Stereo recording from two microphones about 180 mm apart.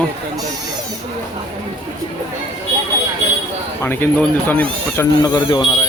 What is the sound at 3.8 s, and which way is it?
Speech, 10° left (ahead or behind).